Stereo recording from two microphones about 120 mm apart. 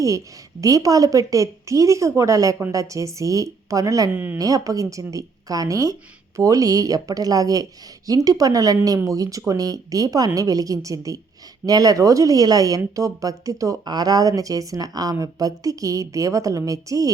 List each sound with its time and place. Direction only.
0.6 s speech: 30° right (ahead or behind)
4.1 s speech: 15° right (ahead or behind)
4.4 s speech: 30° right (ahead or behind)